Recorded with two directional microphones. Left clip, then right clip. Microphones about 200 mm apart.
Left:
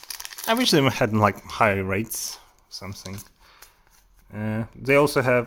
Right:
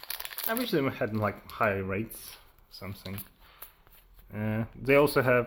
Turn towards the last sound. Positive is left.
turn(degrees=25)  # may be behind; listen again after turning